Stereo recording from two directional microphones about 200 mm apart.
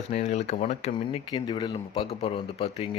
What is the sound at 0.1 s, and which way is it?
Speech, 35° left (ahead or behind).